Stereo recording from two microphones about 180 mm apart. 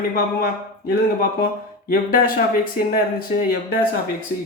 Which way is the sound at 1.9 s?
55° left (ahead or behind).